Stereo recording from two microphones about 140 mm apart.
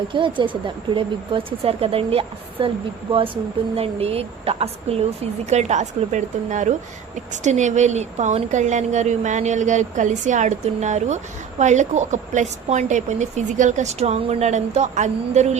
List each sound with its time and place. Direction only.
0.1 s a woman's voice: 35° right (ahead or behind); by 15.5 s 55° right (ahead or behind)